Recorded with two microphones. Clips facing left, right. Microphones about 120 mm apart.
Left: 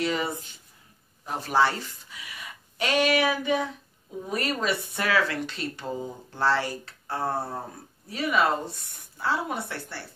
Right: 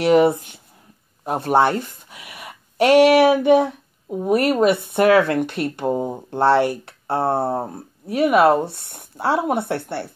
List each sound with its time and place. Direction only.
0.0 s speech: 65° right (ahead or behind)